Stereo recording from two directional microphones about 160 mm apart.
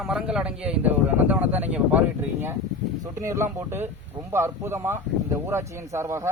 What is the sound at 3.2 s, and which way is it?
Speech, 15° right (ahead or behind).